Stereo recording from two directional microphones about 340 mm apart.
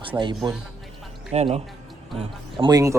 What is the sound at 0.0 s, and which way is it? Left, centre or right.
Speech, centre.